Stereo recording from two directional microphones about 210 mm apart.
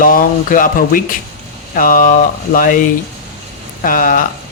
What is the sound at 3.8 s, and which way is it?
Speech, 40° left (ahead or behind).